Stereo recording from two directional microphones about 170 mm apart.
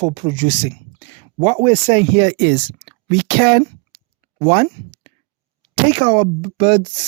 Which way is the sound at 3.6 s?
30° right (ahead or behind).